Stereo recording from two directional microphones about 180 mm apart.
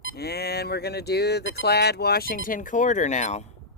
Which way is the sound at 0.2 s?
60° left (ahead or behind).